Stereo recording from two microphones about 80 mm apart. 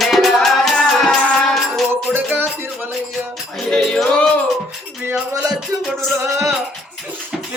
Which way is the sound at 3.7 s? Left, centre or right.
Centre.